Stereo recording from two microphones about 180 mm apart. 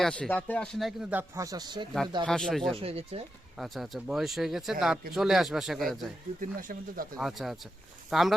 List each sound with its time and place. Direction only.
0.0 s speech: 5° left (ahead or behind)
1.4 s speech: 20° right (ahead or behind)
2.2 s speech: 5° left (ahead or behind)
2.7 s speech: 35° right (ahead or behind)
3.6 s speech: centre (ahead or behind)
6.4 s speech: 50° right (ahead or behind)
7.2 s speech: centre (ahead or behind)